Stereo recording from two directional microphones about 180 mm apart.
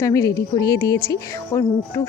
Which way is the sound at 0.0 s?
15° left (ahead or behind).